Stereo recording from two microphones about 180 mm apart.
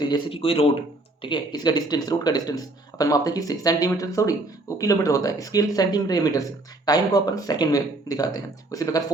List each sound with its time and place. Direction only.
0.0 s a man's voice: 25° left (ahead or behind)